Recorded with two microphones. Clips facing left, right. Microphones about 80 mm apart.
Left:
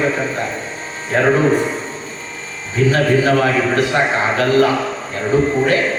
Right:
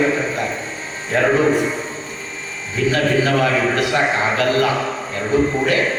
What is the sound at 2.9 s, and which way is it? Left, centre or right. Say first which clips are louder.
A man's voice: left 2 dB; left.